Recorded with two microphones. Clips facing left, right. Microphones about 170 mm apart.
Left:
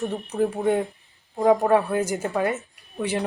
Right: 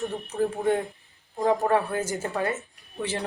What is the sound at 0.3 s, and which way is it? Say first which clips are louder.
Speech: left 2 dB; 20° left (ahead or behind).